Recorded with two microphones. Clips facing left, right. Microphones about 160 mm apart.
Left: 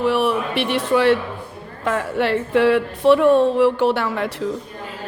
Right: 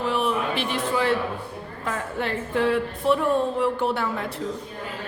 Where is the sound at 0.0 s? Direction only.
70° left (ahead or behind).